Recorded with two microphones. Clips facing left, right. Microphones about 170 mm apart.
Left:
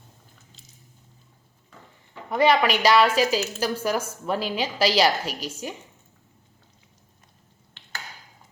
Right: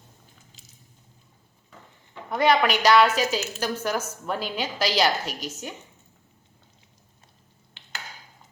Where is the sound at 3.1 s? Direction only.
35° left (ahead or behind).